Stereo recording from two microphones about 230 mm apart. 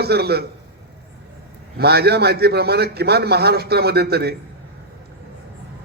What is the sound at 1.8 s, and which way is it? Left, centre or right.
A man's voice, right.